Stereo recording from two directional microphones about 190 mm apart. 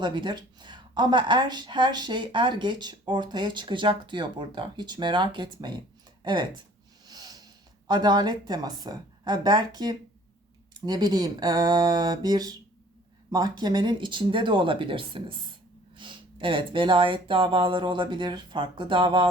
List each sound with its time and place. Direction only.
0.0 s speech: 25° right (ahead or behind)
7.0 s snort: 20° right (ahead or behind)
7.9 s speech: 20° right (ahead or behind)